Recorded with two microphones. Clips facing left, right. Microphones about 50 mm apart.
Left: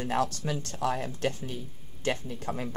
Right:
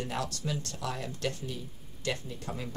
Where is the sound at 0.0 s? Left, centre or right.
Left.